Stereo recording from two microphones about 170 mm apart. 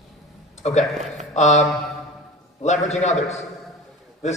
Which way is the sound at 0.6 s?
40° left (ahead or behind).